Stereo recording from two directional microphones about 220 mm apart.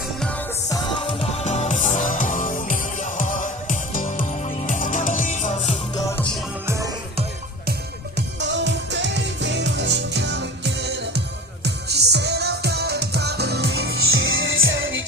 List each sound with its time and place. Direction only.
0.7 s music: 20° left (ahead or behind)
6.7 s music: 15° right (ahead or behind)
8.4 s music: 55° right (ahead or behind)